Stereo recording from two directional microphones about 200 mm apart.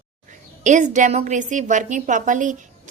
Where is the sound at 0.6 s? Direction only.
35° right (ahead or behind).